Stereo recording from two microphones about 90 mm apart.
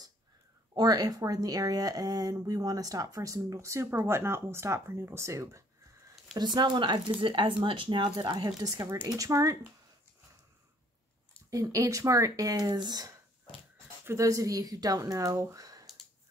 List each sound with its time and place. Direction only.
0.7 s speech: 45° right (ahead or behind)
6.3 s speech: 55° right (ahead or behind); by 9.6 s 40° right (ahead or behind)
11.5 s speech: 40° right (ahead or behind)
14.0 s speech: 35° right (ahead or behind)